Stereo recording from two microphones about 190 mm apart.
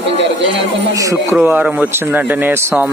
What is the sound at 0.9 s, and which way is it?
Speech, 15° right (ahead or behind).